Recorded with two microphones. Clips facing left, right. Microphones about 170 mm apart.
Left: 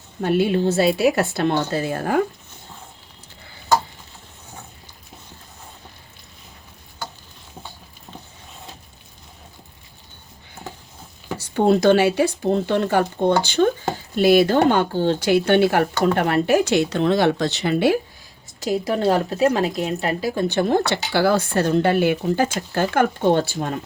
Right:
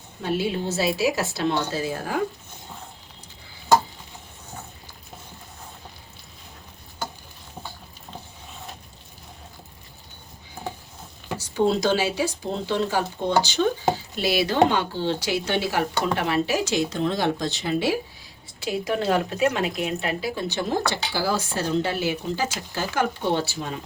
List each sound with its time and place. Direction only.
0.2 s speech: 55° left (ahead or behind)
11.3 s speech: 60° left (ahead or behind)
18.6 s speech: 40° left (ahead or behind); by 23.8 s 55° left (ahead or behind)